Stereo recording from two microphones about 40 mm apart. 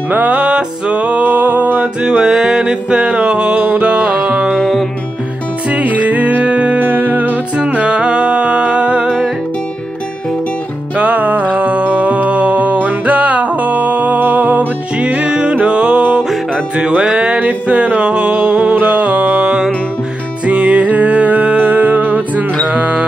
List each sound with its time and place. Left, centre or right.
0.1 s music: right
2.0 s music: right
4.6 s music: centre
5.7 s music: right
6.8 s music: right
7.7 s music: right
11.0 s music: right
15.0 s music: right
17.4 s music: right